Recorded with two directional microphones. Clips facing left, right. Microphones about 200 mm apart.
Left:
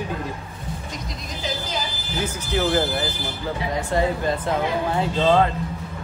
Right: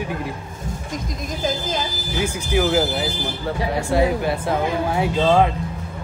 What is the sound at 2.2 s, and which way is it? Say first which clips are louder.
Speech: right 3 dB; 10° right (ahead or behind).